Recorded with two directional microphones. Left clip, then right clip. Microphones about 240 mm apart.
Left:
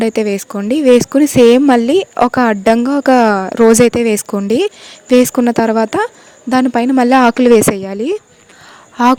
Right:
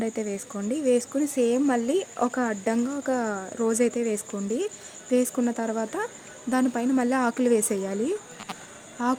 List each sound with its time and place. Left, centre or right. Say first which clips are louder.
0.0 s speech: left 15 dB; left